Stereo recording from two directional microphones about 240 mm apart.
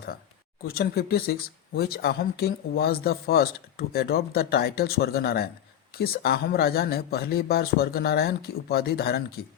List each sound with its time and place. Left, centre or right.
0.6 s speech: left